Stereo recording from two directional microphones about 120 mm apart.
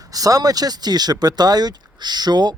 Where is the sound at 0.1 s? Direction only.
30° right (ahead or behind).